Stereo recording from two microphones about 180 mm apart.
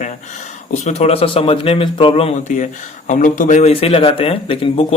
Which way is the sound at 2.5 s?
45° left (ahead or behind).